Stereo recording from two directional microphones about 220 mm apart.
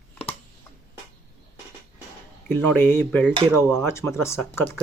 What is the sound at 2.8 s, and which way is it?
Speech, 10° left (ahead or behind).